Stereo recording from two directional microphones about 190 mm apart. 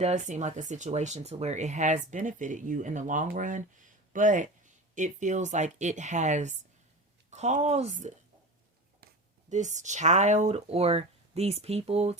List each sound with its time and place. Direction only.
0.0 s speech: 35° right (ahead or behind)
9.5 s speech: 40° right (ahead or behind)